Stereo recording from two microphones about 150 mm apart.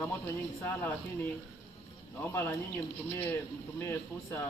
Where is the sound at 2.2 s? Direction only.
15° left (ahead or behind).